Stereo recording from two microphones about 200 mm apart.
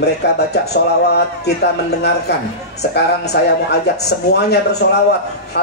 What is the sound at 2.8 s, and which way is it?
A man's voice, 55° left (ahead or behind).